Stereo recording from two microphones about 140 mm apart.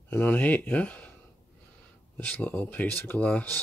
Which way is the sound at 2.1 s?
10° left (ahead or behind).